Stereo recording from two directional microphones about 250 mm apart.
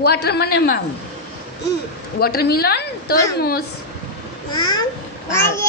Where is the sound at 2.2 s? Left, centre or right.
Left.